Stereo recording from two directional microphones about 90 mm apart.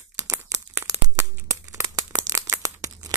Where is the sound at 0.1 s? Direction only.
30° right (ahead or behind).